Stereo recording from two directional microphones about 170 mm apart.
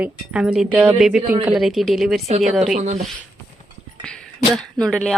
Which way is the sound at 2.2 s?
40° right (ahead or behind).